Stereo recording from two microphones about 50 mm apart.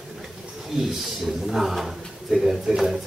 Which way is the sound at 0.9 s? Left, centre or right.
Centre.